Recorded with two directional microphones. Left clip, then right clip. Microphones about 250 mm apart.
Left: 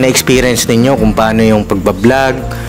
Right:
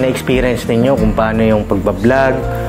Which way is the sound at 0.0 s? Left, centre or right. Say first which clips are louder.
Left 5 dB; left.